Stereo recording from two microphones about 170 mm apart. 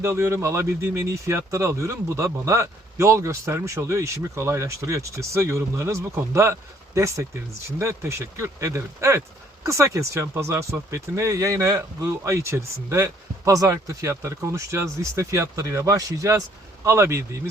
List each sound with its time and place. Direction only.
0.0 s speech: 15° right (ahead or behind)